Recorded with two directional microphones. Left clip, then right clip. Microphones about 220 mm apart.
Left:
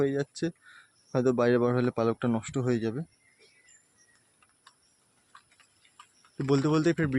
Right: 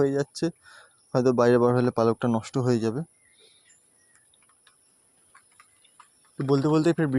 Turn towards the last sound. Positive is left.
turn(degrees=-15)  # may be behind; listen again after turning